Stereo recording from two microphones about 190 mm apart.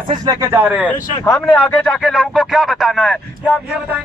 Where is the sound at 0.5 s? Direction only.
10° right (ahead or behind).